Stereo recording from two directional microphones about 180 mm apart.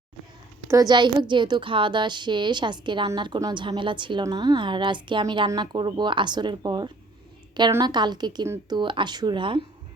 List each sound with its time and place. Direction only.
0.7 s a woman's voice: 20° right (ahead or behind)